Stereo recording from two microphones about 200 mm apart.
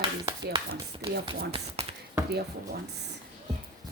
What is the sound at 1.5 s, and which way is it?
Speech, 30° right (ahead or behind).